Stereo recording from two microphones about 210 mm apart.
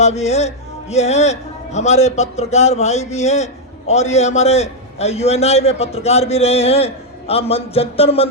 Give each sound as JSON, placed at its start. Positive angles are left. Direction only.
{"t": 0.0, "sound": "speech", "side_deg": 30}